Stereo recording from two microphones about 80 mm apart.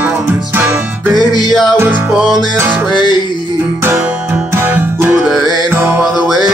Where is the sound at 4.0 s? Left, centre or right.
Centre.